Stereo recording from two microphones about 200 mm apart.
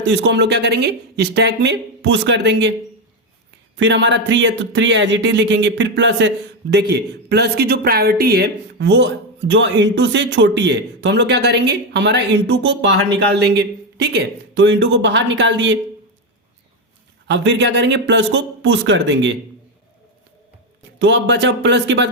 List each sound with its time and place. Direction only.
0.0 s speech: 60° right (ahead or behind)
3.8 s speech: 65° right (ahead or behind)
17.2 s speech: 60° right (ahead or behind)
21.0 s speech: 60° right (ahead or behind)